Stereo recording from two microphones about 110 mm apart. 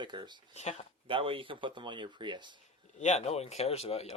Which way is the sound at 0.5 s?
90° left.